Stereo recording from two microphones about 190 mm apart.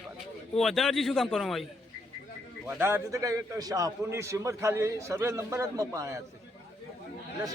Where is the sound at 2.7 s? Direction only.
10° right (ahead or behind).